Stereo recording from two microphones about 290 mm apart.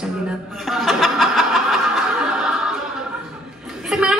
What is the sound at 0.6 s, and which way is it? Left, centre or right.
Snicker, centre.